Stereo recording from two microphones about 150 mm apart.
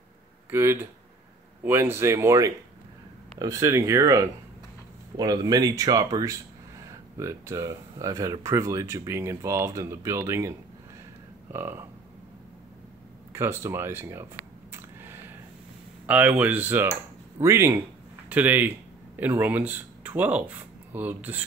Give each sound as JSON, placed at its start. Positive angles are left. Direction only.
{"t": 0.5, "sound": "speech", "side_deg": -15}
{"t": 11.5, "sound": "speech", "side_deg": -15}
{"t": 13.3, "sound": "speech", "side_deg": -15}
{"t": 14.7, "sound": "a sound", "side_deg": -15}
{"t": 16.1, "sound": "speech", "side_deg": -10}